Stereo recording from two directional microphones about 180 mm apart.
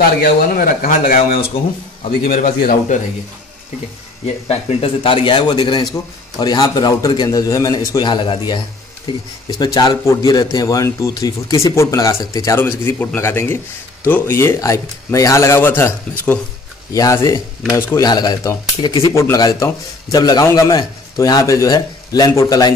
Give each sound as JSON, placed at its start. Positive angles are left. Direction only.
{"t": 0.2, "sound": "speech", "side_deg": 50}
{"t": 4.5, "sound": "a man's voice", "side_deg": 35}